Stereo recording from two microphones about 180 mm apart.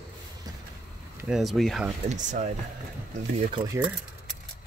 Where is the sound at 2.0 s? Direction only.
45° right (ahead or behind).